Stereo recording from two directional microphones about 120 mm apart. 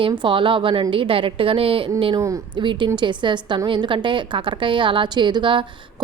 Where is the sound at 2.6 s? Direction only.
40° right (ahead or behind).